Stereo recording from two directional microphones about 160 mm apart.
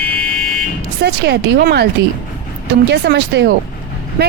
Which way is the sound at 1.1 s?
90° right.